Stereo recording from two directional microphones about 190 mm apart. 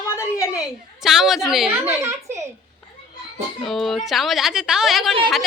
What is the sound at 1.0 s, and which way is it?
A woman's voice, centre (ahead or behind).